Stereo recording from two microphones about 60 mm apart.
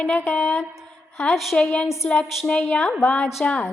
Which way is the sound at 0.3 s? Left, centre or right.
Left.